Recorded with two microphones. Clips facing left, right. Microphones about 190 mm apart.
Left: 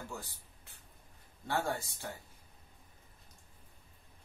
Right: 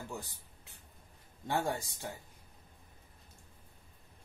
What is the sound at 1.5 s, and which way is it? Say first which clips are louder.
Speech: right 1 dB; 15° right (ahead or behind).